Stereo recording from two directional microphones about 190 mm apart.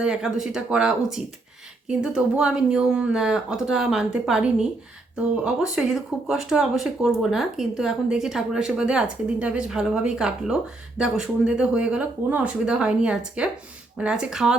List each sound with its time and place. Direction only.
0.0 s speech: 5° right (ahead or behind)